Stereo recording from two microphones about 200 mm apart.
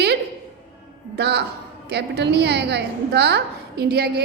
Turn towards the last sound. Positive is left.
turn(degrees=-50)  # may be behind; listen again after turning